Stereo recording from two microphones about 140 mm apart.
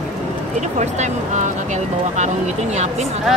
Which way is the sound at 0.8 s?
55° right (ahead or behind).